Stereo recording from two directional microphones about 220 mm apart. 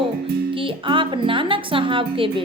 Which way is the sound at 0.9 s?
20° right (ahead or behind).